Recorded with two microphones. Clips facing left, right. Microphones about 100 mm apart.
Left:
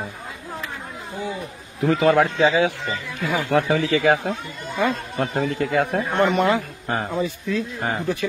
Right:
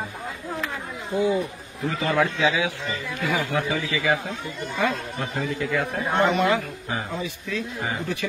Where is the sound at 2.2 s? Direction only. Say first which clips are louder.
Left 4 dB; 50° left (ahead or behind).